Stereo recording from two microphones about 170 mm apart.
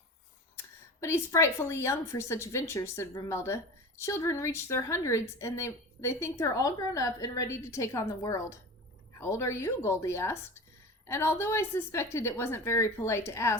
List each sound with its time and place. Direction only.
1.0 s a woman's voice: 15° left (ahead or behind)